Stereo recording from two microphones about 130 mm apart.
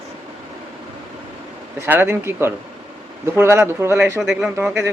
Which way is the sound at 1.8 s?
15° right (ahead or behind).